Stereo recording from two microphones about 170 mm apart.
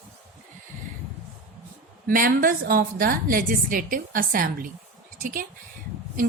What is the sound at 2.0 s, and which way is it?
A woman's voice, 55° right (ahead or behind).